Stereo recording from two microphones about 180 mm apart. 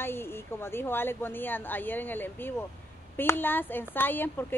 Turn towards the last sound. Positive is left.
turn(degrees=10)  # may be behind; listen again after turning